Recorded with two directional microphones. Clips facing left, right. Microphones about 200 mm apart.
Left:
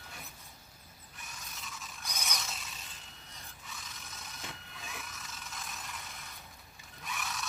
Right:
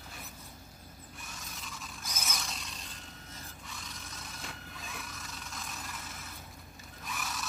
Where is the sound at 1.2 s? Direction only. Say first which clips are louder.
Even; centre (ahead or behind).